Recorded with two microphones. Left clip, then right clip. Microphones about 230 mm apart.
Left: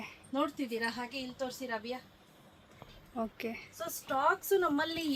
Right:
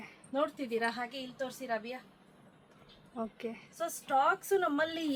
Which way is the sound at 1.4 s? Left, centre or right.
Centre.